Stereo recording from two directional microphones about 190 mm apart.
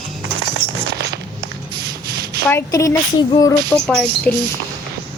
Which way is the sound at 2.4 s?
15° left (ahead or behind).